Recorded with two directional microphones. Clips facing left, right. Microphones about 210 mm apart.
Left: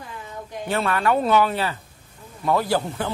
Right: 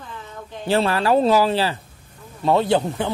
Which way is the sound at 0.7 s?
30° right (ahead or behind).